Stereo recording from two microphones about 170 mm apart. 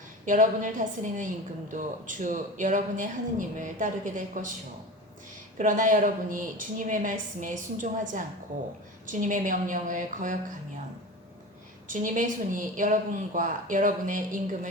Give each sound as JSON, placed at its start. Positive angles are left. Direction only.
{"t": 0.3, "sound": "a woman's voice", "side_deg": -50}
{"t": 5.5, "sound": "a woman's voice", "side_deg": -50}
{"t": 11.9, "sound": "a woman's voice", "side_deg": -50}